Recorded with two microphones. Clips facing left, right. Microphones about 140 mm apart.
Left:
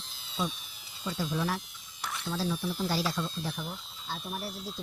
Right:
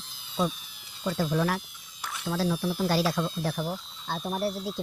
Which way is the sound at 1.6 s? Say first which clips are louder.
Even; 5° right (ahead or behind).